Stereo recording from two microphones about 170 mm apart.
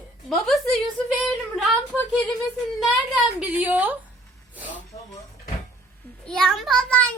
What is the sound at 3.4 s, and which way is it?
Speech, 10° right (ahead or behind).